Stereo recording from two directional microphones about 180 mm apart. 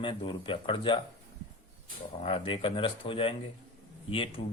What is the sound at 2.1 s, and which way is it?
A man's voice, 30° left (ahead or behind).